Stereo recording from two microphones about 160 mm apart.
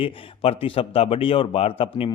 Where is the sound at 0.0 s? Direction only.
35° left (ahead or behind).